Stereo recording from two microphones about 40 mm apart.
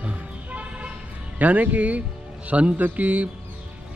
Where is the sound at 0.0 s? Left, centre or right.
Right.